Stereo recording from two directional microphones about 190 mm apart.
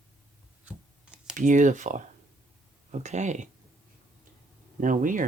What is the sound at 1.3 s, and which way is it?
Speech, 40° right (ahead or behind).